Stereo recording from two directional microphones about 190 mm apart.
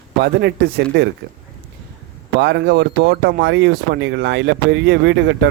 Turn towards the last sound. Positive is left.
turn(degrees=-65)  # may be behind; listen again after turning